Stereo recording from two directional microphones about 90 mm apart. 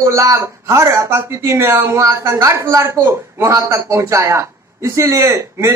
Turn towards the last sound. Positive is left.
turn(degrees=-30)  # may be behind; listen again after turning